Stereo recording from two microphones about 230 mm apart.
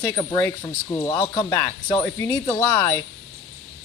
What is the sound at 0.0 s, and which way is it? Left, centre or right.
Speech, centre.